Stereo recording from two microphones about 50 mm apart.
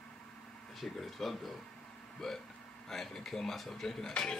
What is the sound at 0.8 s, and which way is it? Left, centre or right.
Speech, centre.